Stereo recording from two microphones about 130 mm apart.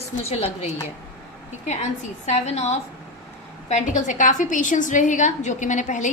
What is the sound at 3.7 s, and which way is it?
A woman's voice, 65° left (ahead or behind).